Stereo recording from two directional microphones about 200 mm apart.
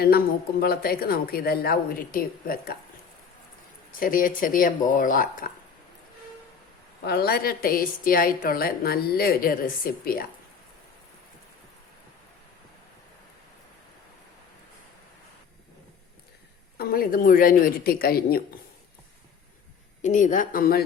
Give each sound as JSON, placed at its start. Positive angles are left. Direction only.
{"t": 0.6, "sound": "a woman's voice", "side_deg": 50}
{"t": 4.0, "sound": "a woman's voice", "side_deg": 45}
{"t": 7.0, "sound": "a woman's voice", "side_deg": 55}
{"t": 16.7, "sound": "a woman's voice", "side_deg": 50}
{"t": 20.0, "sound": "speech", "side_deg": 40}